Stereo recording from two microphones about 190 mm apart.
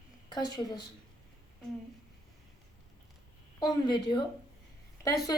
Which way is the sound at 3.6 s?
25° left (ahead or behind).